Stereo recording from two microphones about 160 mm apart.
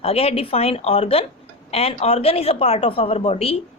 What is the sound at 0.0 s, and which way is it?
Speech, 40° left (ahead or behind).